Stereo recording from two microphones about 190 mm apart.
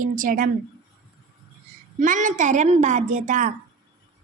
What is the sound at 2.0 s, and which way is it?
A child's voice, 45° right (ahead or behind).